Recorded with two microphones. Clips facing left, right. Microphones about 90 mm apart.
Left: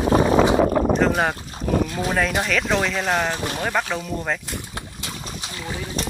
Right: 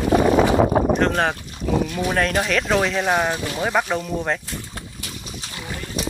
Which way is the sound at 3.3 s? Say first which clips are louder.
Even; 30° left (ahead or behind).